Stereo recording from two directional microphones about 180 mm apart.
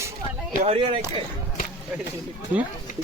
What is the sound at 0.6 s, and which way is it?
Speech, 30° right (ahead or behind).